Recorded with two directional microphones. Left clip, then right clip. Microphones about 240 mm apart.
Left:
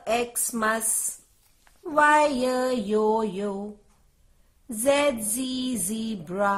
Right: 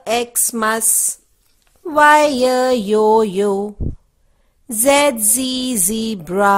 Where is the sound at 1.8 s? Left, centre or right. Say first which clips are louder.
Right 9 dB; right.